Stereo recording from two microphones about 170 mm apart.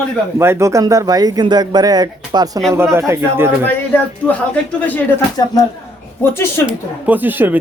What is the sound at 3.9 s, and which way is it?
Speech, 10° left (ahead or behind).